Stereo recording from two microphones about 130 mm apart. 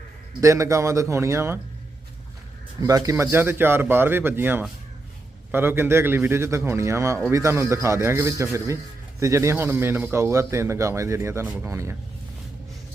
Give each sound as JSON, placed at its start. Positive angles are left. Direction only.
{"t": 0.4, "sound": "speech", "side_deg": -25}
{"t": 2.8, "sound": "speech", "side_deg": -25}